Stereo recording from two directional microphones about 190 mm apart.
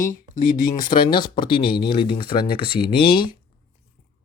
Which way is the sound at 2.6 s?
55° left (ahead or behind).